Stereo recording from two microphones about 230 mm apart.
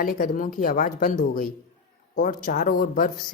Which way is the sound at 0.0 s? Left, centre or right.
Left.